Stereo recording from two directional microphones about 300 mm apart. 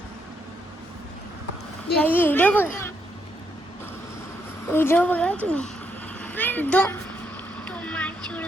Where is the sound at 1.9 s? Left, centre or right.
Centre.